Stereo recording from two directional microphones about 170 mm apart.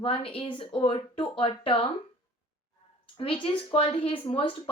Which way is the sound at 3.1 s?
35° left (ahead or behind).